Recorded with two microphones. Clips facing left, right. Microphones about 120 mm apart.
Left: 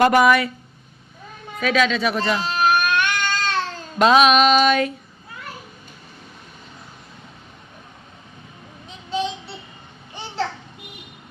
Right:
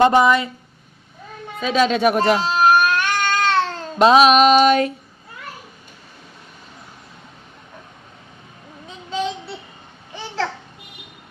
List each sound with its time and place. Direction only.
0.0 s speech: 25° right (ahead or behind)
1.6 s music: 30° right (ahead or behind)
1.9 s baby cry: 50° right (ahead or behind); by 3.8 s 65° right (ahead or behind)
3.9 s music: 35° right (ahead or behind)